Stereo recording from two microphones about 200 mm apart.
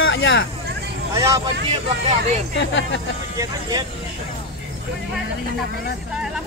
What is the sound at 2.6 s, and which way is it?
Speech, 65° left (ahead or behind).